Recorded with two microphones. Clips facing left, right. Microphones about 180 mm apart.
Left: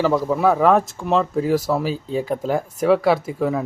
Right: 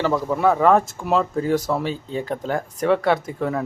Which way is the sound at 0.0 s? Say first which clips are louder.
Left 2 dB; 5° left (ahead or behind).